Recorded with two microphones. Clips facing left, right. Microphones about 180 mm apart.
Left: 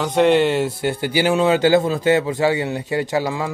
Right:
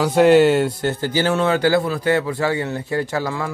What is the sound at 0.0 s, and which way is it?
Speech, 5° right (ahead or behind).